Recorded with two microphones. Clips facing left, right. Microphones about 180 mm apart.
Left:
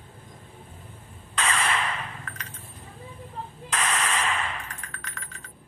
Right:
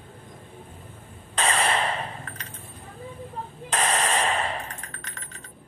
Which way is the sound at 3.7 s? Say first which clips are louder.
Right 3 dB; 35° right (ahead or behind).